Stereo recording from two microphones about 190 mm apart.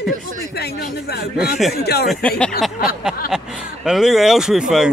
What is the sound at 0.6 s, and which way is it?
Speech, 55° left (ahead or behind).